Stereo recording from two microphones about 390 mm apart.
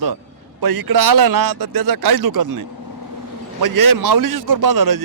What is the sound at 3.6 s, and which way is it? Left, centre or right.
A man's voice, right.